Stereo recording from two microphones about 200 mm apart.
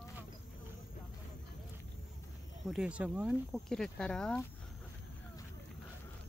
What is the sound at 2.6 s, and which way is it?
Speech, 5° right (ahead or behind).